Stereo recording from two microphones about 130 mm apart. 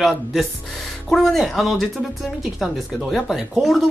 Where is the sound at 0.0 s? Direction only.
Centre (ahead or behind).